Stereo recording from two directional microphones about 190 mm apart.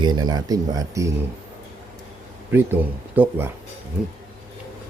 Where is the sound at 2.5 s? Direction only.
10° right (ahead or behind).